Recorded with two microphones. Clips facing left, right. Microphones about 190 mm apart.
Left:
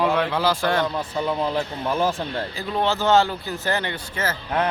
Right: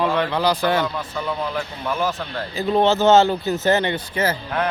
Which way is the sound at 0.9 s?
25° left (ahead or behind).